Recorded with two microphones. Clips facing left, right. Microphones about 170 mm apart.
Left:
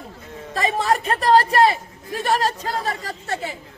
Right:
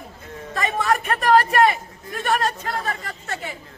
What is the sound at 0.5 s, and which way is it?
Speech, 30° left (ahead or behind).